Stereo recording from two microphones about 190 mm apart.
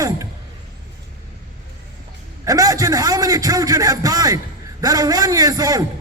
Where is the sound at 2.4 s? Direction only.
20° right (ahead or behind).